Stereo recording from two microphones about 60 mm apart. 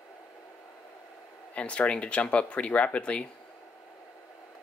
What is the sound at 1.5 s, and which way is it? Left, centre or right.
Speech, left.